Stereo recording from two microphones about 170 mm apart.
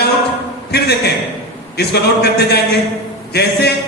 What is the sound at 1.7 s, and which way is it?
Speech, 75° left (ahead or behind).